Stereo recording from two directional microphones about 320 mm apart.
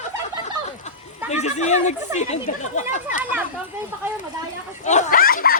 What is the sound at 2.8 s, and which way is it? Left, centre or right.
Speech, left.